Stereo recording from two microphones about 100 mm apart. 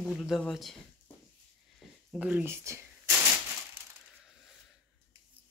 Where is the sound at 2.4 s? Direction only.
30° right (ahead or behind).